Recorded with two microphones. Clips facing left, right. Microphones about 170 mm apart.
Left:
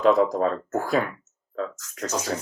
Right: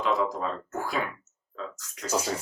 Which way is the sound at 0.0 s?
45° left (ahead or behind).